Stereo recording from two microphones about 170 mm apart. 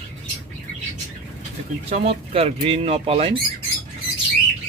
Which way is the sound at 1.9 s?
35° right (ahead or behind).